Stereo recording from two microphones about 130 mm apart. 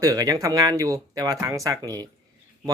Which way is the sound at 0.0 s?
30° right (ahead or behind).